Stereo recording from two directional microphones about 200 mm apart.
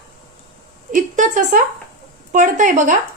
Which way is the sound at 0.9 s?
40° right (ahead or behind).